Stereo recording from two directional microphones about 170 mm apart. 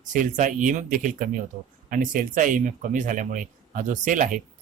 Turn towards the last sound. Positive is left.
turn(degrees=-50)  # may be behind; listen again after turning